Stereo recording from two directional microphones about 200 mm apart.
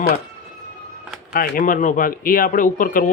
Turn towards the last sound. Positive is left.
turn(degrees=45)  # may be behind; listen again after turning